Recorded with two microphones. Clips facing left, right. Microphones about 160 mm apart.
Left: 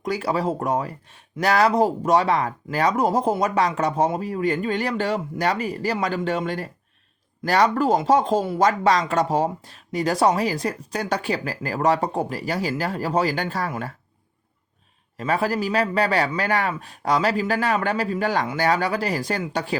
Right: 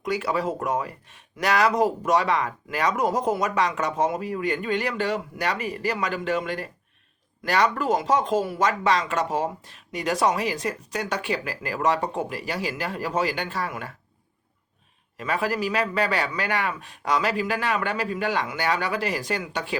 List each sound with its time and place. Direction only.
0.0 s speech: 35° left (ahead or behind)
15.2 s speech: 35° left (ahead or behind)